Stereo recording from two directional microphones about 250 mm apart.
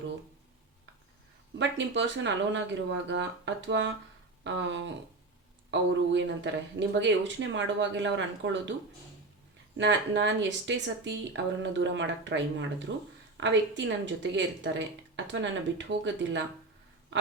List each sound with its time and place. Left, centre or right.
1.5 s a woman's voice: right
9.7 s a woman's voice: right